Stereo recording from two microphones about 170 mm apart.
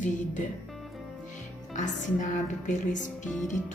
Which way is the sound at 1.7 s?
45° left (ahead or behind).